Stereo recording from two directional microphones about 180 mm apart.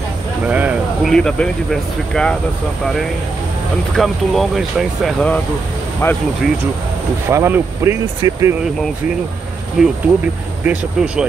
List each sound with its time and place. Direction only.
0.5 s a sound: 5° right (ahead or behind)
1.1 s speech: 5° left (ahead or behind)
3.9 s speech: centre (ahead or behind)
7.2 s speech: 15° right (ahead or behind)
9.8 s speech: centre (ahead or behind)